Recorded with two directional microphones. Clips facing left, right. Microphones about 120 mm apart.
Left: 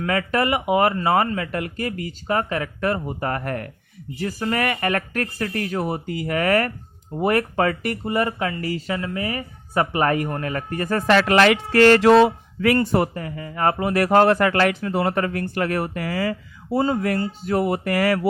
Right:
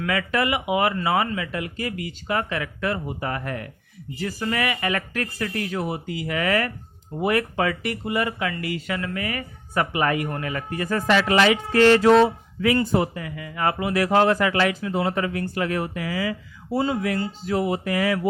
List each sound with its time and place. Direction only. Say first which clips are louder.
0.0 s speech: left 2 dB; 40° left (ahead or behind); by 13.1 s 55° left (ahead or behind)
13.1 s speech: left 2 dB; 40° left (ahead or behind)
14.0 s speech: left 3 dB; 55° left (ahead or behind)